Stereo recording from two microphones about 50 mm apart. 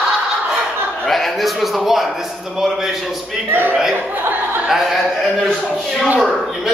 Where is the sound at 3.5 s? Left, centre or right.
Right.